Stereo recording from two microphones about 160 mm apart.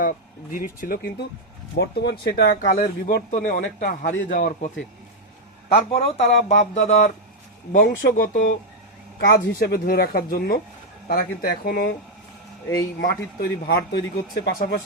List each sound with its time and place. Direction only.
0.0 s speech: 60° left (ahead or behind)
1.8 s a man's voice: 90° left
3.3 s speech: 60° left (ahead or behind)
5.9 s speech: 35° left (ahead or behind)
6.6 s a sound: 45° left (ahead or behind)
7.7 s speech: 55° left (ahead or behind)
9.2 s a woman's voice: 70° left (ahead or behind)
13.0 s a man's voice: 80° left